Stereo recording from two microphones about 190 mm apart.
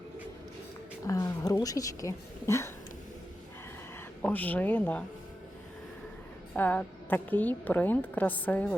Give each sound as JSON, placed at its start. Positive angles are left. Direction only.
{"t": 1.0, "sound": "speech", "side_deg": 15}
{"t": 4.2, "sound": "a woman's voice", "side_deg": 10}
{"t": 6.5, "sound": "a woman's voice", "side_deg": 10}